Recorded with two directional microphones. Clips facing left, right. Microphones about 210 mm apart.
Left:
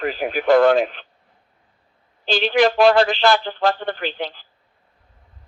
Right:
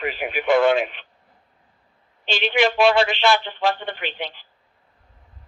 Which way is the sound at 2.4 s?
Centre (ahead or behind).